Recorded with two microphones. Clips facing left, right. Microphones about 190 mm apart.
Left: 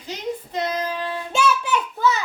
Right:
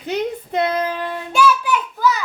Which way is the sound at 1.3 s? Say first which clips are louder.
Right 4 dB; 25° left (ahead or behind).